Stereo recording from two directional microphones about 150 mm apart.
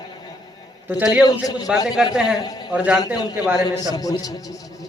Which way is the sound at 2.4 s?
25° left (ahead or behind).